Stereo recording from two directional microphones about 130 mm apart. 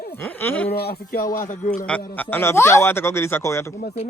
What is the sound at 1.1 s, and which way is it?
Speech, 90° left.